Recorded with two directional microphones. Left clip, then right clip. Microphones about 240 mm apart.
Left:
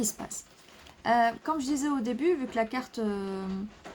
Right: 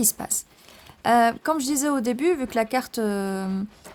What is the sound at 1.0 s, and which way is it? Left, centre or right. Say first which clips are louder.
Speech: right 6 dB; right.